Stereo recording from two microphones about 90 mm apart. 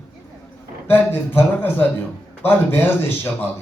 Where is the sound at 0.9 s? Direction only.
20° left (ahead or behind).